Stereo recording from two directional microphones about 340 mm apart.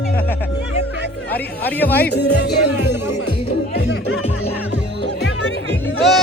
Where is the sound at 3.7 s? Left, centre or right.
Left.